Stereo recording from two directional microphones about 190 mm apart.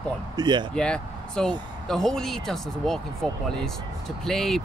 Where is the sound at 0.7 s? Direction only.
5° left (ahead or behind).